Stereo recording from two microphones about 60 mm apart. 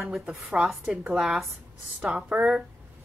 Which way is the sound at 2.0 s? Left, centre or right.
Centre.